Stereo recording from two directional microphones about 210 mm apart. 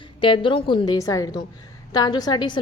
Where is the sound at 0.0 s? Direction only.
25° left (ahead or behind).